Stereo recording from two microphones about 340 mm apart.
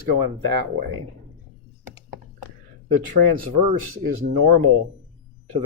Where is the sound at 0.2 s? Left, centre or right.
Right.